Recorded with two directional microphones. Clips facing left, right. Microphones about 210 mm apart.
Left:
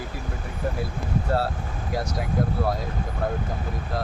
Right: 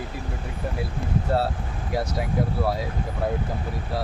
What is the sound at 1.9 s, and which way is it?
Speech, 5° right (ahead or behind).